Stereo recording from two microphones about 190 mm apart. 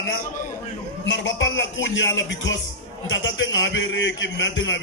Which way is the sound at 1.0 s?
80° left.